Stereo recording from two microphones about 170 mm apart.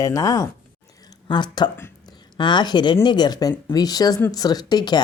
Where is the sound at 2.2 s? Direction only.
25° left (ahead or behind).